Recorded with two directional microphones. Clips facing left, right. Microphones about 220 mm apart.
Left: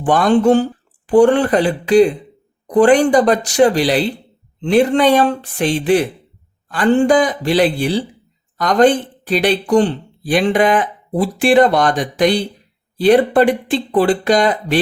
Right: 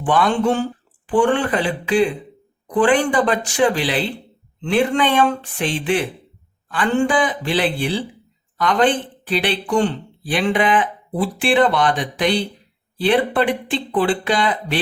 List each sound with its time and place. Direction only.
0.0 s speech: 40° left (ahead or behind)